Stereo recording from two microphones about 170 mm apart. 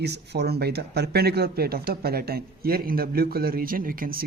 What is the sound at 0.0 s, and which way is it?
Speech, 80° right.